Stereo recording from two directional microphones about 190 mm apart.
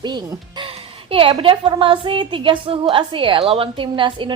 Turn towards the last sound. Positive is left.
turn(degrees=-25)  # may be behind; listen again after turning